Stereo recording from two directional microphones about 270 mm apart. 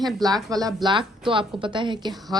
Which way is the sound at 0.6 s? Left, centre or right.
Centre.